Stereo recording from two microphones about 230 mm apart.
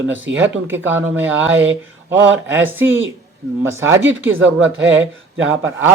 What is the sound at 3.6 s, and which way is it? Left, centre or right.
Speech, centre.